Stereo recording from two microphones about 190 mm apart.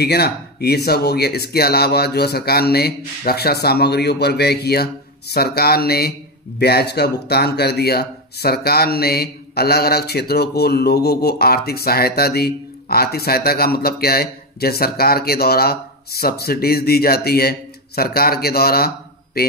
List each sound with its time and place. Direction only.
0.0 s speech: 55° left (ahead or behind)